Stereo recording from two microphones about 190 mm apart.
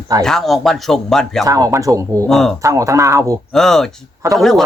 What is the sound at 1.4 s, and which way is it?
Speech, 15° right (ahead or behind).